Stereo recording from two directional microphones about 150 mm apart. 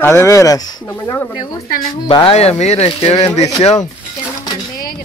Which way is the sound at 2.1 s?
40° left (ahead or behind).